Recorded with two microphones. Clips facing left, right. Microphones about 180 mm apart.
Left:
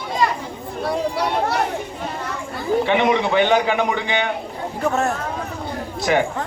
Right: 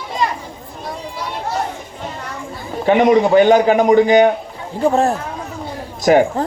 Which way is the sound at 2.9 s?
40° right (ahead or behind).